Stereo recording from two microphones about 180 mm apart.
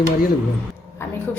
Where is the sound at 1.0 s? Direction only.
15° left (ahead or behind).